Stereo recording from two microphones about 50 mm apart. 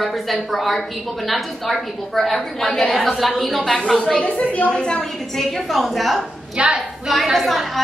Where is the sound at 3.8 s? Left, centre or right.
Centre.